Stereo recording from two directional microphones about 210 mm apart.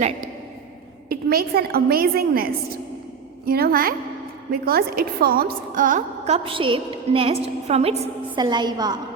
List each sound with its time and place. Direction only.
1.1 s a woman's voice: 45° right (ahead or behind)
3.5 s a woman's voice: 45° right (ahead or behind); by 9.0 s 20° right (ahead or behind)